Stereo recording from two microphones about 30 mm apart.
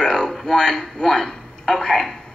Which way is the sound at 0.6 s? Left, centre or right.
Left.